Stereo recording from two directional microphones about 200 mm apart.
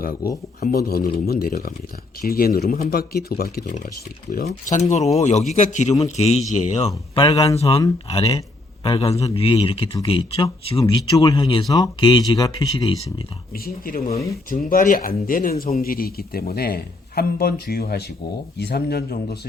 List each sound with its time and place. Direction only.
0.6 s a man's voice: 50° left (ahead or behind); by 13.2 s 25° left (ahead or behind)
13.5 s speech: 45° left (ahead or behind)